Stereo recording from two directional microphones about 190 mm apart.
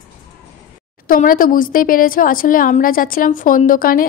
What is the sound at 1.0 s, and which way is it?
Speech, 45° left (ahead or behind).